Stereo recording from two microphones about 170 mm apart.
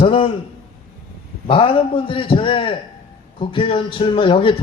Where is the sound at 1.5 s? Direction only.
30° left (ahead or behind).